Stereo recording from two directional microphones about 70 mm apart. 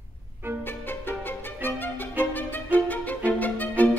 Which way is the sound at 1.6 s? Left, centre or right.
Left.